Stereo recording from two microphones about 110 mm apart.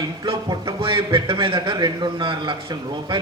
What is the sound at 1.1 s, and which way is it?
A man's voice, 50° right (ahead or behind).